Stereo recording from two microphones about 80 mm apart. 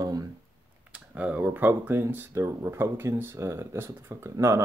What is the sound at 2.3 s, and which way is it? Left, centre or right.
Speech, right.